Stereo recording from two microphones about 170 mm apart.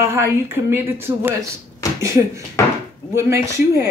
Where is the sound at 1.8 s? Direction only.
20° left (ahead or behind).